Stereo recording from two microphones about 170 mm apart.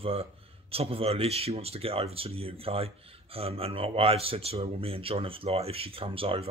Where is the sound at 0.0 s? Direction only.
35° right (ahead or behind).